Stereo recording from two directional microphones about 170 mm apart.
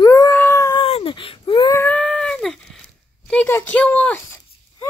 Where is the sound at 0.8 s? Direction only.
30° left (ahead or behind).